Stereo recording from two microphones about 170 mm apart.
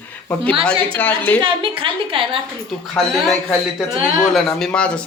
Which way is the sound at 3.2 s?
Centre (ahead or behind).